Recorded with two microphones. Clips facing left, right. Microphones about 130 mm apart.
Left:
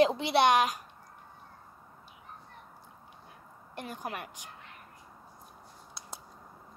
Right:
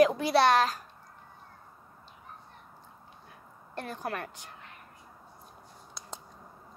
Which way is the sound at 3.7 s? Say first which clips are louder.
Right 3 dB; 15° left (ahead or behind).